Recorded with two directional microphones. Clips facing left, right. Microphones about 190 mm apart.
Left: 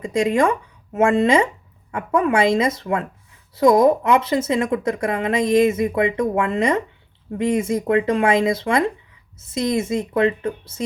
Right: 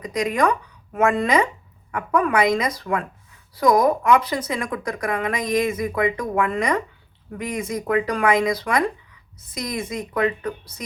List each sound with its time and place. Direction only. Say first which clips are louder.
0.0 s speech: left 3 dB; 25° left (ahead or behind)